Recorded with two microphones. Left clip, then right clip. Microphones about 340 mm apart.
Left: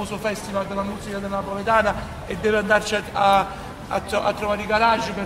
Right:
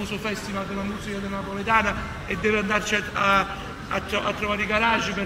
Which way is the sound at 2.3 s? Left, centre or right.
Left.